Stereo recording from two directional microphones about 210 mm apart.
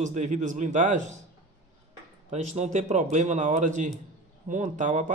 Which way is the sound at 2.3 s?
30° right (ahead or behind).